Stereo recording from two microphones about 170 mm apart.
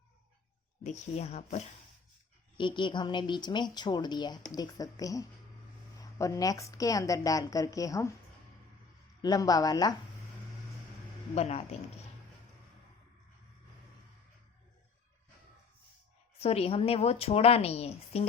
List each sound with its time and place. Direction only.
0.9 s a woman's voice: 40° left (ahead or behind)
2.6 s a woman's voice: 30° left (ahead or behind)
9.2 s a woman's voice: 20° left (ahead or behind)
11.3 s a woman's voice: 40° left (ahead or behind)
16.4 s a woman's voice: 35° left (ahead or behind)